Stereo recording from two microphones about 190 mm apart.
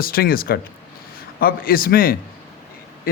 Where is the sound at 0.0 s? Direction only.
50° left (ahead or behind).